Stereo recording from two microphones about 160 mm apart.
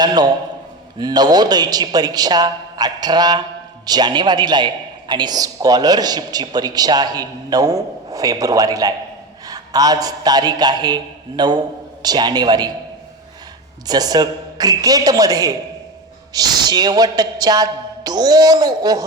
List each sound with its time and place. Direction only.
0.0 s a man's voice: 25° right (ahead or behind)
13.8 s a man's voice: 25° right (ahead or behind)